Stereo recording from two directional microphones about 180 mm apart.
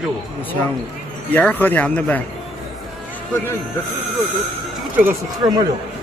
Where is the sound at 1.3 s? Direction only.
10° left (ahead or behind).